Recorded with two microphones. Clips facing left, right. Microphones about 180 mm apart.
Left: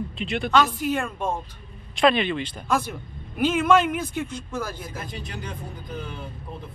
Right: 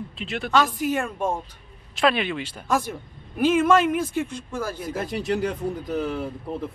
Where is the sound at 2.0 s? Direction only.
5° right (ahead or behind).